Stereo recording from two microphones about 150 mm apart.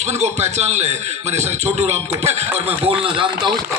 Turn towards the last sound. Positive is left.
turn(degrees=-35)  # may be behind; listen again after turning